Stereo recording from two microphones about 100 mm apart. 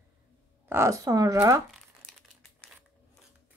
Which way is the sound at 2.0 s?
70° right (ahead or behind).